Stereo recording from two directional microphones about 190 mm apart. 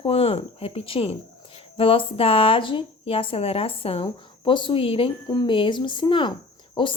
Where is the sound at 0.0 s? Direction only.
30° left (ahead or behind).